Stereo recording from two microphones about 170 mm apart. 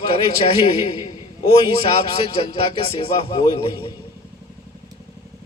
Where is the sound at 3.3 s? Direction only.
30° left (ahead or behind).